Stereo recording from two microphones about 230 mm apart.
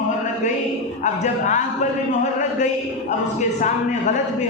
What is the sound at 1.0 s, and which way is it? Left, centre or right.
Speech, left.